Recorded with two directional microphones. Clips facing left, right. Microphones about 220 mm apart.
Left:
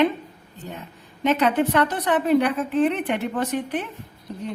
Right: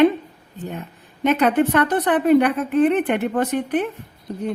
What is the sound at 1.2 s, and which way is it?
Speech, 55° right (ahead or behind).